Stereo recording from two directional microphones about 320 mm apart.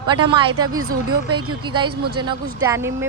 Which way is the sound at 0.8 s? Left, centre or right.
Right.